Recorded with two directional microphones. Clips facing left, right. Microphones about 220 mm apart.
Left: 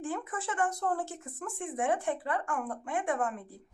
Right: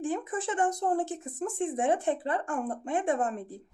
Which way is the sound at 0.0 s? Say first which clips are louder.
Right 5 dB; 15° right (ahead or behind).